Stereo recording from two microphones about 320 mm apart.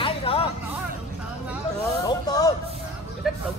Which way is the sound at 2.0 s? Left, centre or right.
Centre.